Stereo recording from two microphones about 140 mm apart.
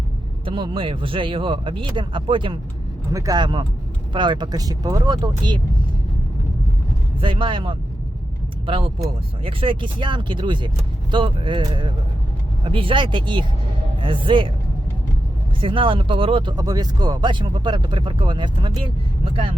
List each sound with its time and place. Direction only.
0.4 s speech: 35° right (ahead or behind)
3.1 s speech: 25° right (ahead or behind)
7.2 s speech: 40° right (ahead or behind)
15.6 s speech: 40° right (ahead or behind)